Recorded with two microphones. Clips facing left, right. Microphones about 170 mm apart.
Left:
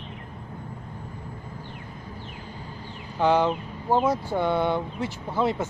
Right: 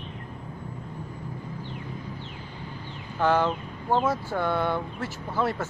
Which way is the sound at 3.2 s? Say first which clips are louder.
Left 2 dB; 15° left (ahead or behind).